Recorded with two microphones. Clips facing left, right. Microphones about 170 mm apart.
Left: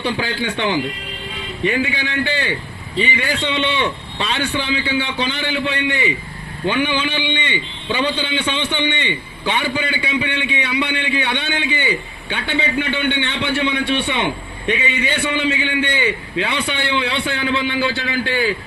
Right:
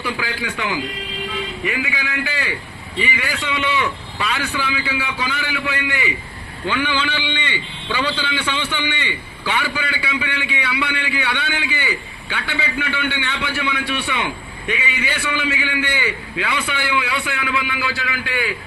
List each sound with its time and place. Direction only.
0.0 s a man's voice: 25° left (ahead or behind)